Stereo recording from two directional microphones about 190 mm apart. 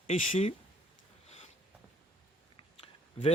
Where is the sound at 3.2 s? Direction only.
30° left (ahead or behind).